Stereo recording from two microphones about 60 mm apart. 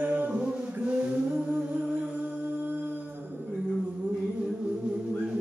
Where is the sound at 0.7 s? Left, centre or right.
Right.